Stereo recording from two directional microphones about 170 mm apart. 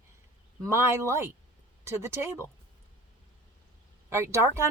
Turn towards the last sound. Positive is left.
turn(degrees=-15)  # may be behind; listen again after turning